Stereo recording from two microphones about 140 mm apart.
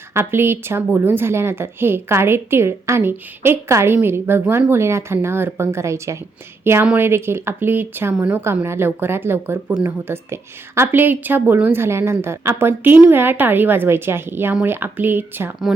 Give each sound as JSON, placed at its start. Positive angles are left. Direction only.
{"t": 0.1, "sound": "a woman's voice", "side_deg": -15}